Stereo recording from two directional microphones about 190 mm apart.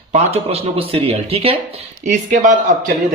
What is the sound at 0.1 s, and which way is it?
A man's voice, 35° right (ahead or behind).